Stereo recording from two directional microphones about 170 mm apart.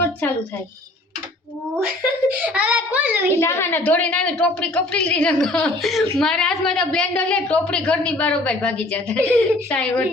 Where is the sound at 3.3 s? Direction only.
15° left (ahead or behind).